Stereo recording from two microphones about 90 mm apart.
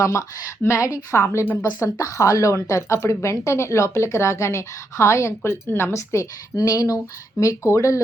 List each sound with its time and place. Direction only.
0.0 s a woman's voice: 35° left (ahead or behind)